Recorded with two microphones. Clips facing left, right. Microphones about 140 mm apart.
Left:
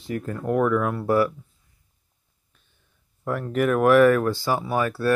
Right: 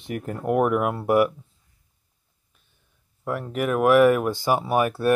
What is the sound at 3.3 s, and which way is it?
Speech, 5° right (ahead or behind).